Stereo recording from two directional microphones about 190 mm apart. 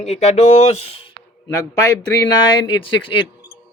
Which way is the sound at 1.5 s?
15° left (ahead or behind).